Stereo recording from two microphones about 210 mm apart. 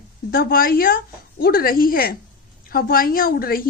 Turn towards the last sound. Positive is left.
turn(degrees=45)  # may be behind; listen again after turning